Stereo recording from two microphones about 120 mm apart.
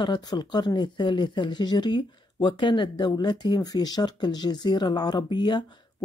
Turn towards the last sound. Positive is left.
turn(degrees=40)  # may be behind; listen again after turning